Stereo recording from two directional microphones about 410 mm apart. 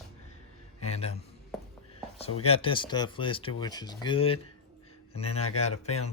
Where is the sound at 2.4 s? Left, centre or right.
Centre.